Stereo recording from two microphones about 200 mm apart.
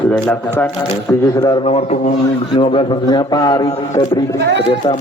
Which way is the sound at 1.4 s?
25° left (ahead or behind).